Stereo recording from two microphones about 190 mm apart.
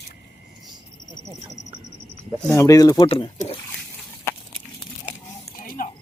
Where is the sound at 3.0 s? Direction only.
30° left (ahead or behind).